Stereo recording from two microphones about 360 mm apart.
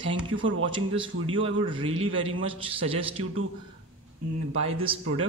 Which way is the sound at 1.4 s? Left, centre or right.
Centre.